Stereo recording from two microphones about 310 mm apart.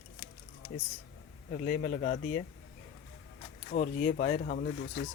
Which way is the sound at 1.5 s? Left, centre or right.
Left.